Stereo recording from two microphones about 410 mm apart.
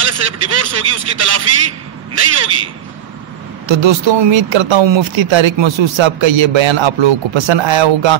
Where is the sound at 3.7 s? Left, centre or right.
Right.